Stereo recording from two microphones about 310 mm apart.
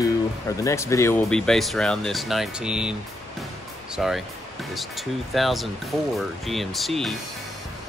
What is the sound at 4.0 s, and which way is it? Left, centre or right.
Speech, centre.